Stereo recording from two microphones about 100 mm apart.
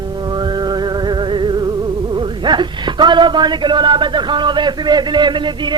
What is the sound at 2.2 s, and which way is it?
Speech, 50° right (ahead or behind).